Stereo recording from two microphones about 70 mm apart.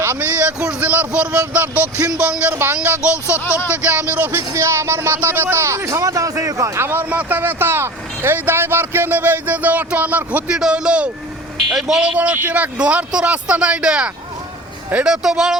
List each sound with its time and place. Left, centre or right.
0.6 s speech: centre
2.6 s speech: right
3.4 s speech: left
3.7 s speech: right
4.5 s speech: right
6.7 s speech: right; by 12.1 s centre
12.1 s speech: centre